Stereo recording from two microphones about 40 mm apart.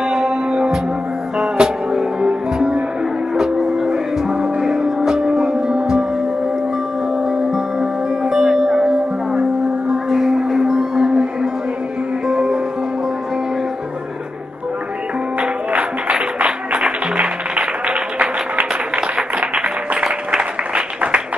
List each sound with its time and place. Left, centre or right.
0.0 s music: centre
7.2 s music: centre
12.3 s music: right
16.3 s music: right
18.9 s a sound: centre
20.2 s applause: right